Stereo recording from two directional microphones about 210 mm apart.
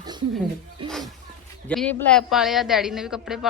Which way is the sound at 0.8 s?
25° right (ahead or behind).